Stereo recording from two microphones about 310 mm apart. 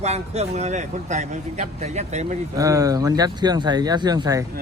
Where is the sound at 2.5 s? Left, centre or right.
Centre.